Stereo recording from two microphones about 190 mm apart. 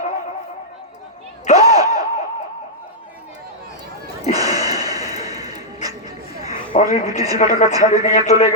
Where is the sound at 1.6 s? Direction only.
20° right (ahead or behind).